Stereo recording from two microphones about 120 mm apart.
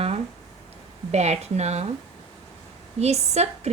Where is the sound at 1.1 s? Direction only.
65° right (ahead or behind).